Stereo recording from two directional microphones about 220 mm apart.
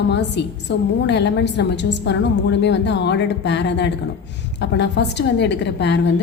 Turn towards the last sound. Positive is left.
turn(degrees=50)  # may be behind; listen again after turning